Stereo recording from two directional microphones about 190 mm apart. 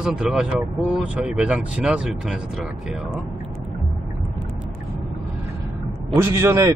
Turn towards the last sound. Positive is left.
turn(degrees=-15)  # may be behind; listen again after turning